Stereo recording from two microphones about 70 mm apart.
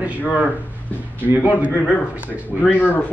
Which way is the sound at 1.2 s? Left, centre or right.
Right.